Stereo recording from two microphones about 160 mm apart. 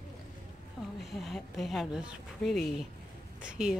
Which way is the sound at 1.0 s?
Centre (ahead or behind).